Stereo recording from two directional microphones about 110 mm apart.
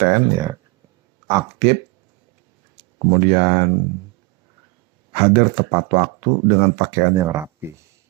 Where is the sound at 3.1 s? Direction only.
30° right (ahead or behind).